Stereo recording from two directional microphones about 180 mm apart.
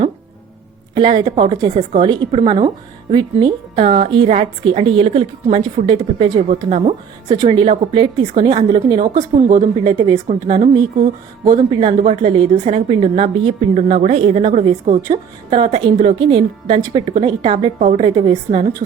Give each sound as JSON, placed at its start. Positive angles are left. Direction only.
{"t": 0.9, "sound": "a woman's voice", "side_deg": -25}